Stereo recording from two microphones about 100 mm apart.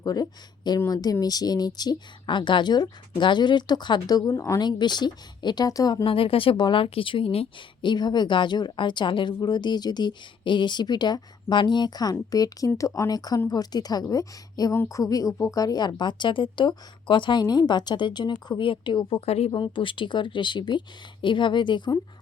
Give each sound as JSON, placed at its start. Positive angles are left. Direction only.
{"t": 0.0, "sound": "speech", "side_deg": 40}
{"t": 6.1, "sound": "a woman's voice", "side_deg": 65}
{"t": 19.2, "sound": "speech", "side_deg": 90}
{"t": 19.5, "sound": "speech", "side_deg": 55}